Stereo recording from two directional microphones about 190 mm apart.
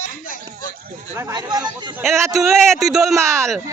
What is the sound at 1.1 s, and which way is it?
Speech, 20° right (ahead or behind).